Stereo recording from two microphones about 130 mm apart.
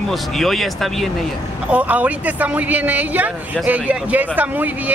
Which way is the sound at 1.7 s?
10° right (ahead or behind).